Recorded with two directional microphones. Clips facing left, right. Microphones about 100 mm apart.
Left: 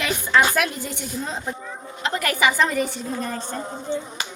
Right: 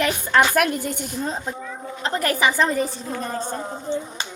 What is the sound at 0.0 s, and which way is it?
A woman's voice, 50° right (ahead or behind).